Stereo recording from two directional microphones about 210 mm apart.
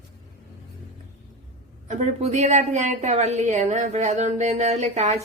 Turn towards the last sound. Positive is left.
turn(degrees=-35)  # may be behind; listen again after turning